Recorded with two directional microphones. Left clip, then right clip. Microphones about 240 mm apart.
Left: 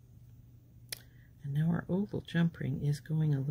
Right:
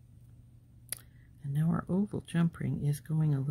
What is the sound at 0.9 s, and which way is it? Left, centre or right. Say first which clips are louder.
Speech: left 2 dB; centre.